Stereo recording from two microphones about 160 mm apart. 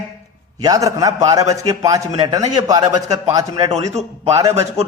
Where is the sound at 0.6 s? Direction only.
20° right (ahead or behind).